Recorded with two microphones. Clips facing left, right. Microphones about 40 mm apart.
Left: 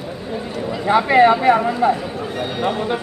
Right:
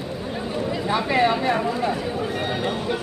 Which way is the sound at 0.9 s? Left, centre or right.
Centre.